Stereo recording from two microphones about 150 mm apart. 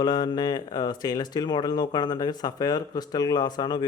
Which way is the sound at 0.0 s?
30° left (ahead or behind).